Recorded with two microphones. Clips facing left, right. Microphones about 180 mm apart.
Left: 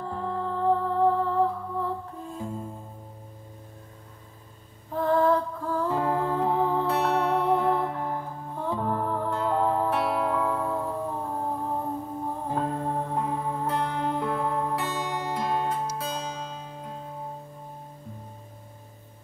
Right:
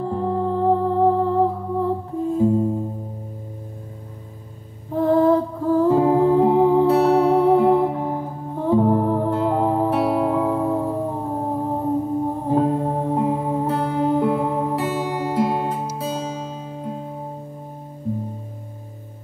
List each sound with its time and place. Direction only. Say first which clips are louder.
0.0 s music: right 9 dB; 20° right (ahead or behind)
4.9 s music: right 7 dB; 20° right (ahead or behind)
9.3 s music: right 6 dB; 10° right (ahead or behind)
10.4 s music: right 7 dB; 20° right (ahead or behind)